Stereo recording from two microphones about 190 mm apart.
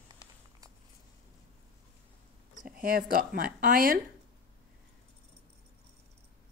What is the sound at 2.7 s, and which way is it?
A woman's voice, 50° right (ahead or behind).